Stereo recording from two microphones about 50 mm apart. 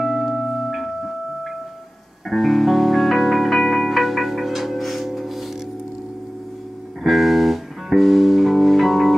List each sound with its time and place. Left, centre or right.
0.0 s music: centre
7.1 s music: centre